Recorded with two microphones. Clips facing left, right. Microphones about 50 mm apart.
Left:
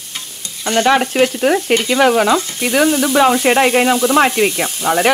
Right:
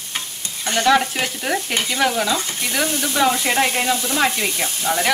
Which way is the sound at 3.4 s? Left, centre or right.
Left.